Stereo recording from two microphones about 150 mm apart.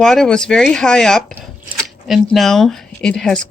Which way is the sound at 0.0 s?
5° left (ahead or behind).